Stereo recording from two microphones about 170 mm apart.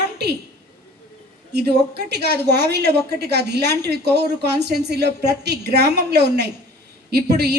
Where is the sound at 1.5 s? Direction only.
75° right (ahead or behind).